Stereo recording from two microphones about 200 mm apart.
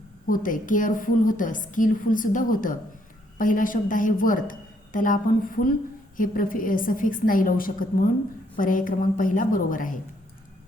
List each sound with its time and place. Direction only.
0.3 s a woman's voice: 45° left (ahead or behind)